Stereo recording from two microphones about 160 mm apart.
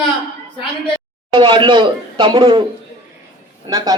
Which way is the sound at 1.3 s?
30° right (ahead or behind).